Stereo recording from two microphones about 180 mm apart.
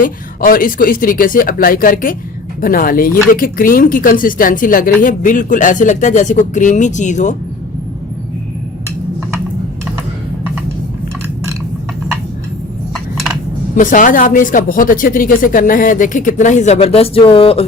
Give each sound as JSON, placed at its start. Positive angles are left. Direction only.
{"t": 0.0, "sound": "speech", "side_deg": 50}
{"t": 13.7, "sound": "speech", "side_deg": 45}